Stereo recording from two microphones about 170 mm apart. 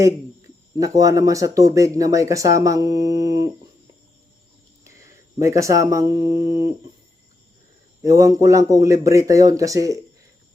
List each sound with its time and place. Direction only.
0.8 s speech: 20° right (ahead or behind)
4.8 s speech: 15° right (ahead or behind)
8.0 s speech: 20° right (ahead or behind)